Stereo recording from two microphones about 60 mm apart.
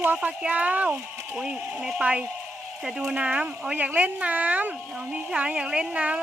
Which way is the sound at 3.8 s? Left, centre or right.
Right.